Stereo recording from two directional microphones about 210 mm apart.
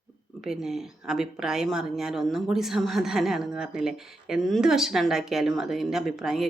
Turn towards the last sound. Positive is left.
turn(degrees=0)  # may be behind; listen again after turning